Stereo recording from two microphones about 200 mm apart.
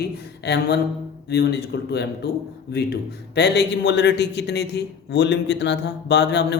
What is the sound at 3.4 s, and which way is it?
A man's voice, 60° left (ahead or behind).